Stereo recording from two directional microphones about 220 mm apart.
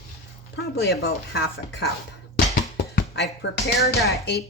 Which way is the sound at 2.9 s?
50° left (ahead or behind).